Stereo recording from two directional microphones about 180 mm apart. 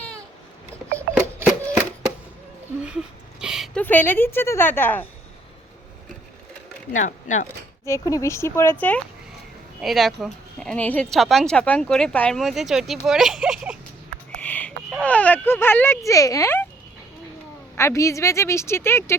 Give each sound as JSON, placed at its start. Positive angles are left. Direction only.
{"t": 0.9, "sound": "a sound", "side_deg": -15}
{"t": 3.4, "sound": "a sound", "side_deg": -5}
{"t": 3.8, "sound": "speech", "side_deg": 10}
{"t": 6.9, "sound": "speech", "side_deg": 45}
{"t": 7.9, "sound": "speech", "side_deg": 15}
{"t": 9.8, "sound": "speech", "side_deg": 0}
{"t": 14.3, "sound": "speech", "side_deg": 10}
{"t": 17.7, "sound": "speech", "side_deg": 15}